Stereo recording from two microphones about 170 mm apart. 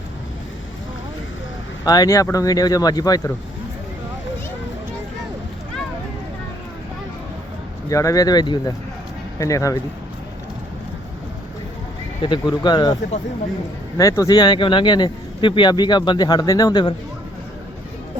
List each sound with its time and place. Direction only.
1.8 s speech: 20° left (ahead or behind)
7.9 s speech: 20° left (ahead or behind)
12.2 s speech: 30° left (ahead or behind)
14.0 s speech: 20° left (ahead or behind)